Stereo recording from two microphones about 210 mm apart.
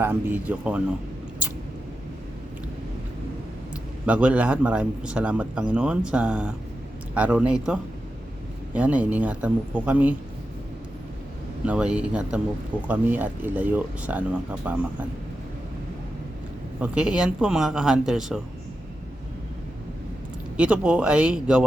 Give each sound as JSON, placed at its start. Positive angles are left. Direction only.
{"t": 0.0, "sound": "speech", "side_deg": -10}
{"t": 4.0, "sound": "a man's voice", "side_deg": -5}
{"t": 11.6, "sound": "a man's voice", "side_deg": -5}
{"t": 16.8, "sound": "a man's voice", "side_deg": -5}
{"t": 20.6, "sound": "a man's voice", "side_deg": -5}